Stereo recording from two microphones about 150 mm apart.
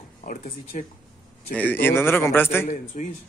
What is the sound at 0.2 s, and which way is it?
Speech, 65° left (ahead or behind).